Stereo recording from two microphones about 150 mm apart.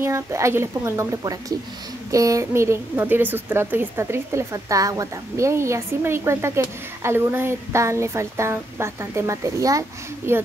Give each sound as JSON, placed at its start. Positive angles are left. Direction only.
{"t": 0.0, "sound": "a woman's voice", "side_deg": -20}